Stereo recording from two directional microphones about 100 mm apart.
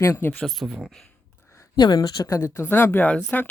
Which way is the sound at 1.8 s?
45° left (ahead or behind).